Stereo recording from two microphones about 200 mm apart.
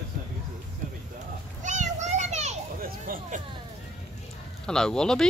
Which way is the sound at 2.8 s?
40° right (ahead or behind).